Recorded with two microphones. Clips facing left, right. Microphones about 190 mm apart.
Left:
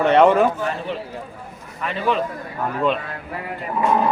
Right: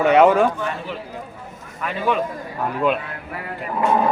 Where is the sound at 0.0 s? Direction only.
5° right (ahead or behind).